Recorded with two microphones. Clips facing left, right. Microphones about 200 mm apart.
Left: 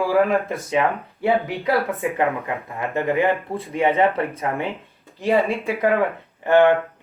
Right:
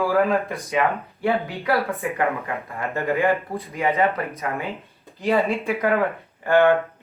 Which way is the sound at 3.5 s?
30° left (ahead or behind).